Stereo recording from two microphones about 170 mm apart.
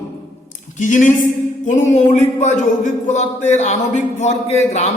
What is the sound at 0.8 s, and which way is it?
A man's voice, 50° left (ahead or behind).